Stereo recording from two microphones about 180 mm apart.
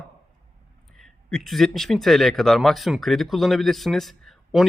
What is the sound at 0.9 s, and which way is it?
Speech, centre (ahead or behind).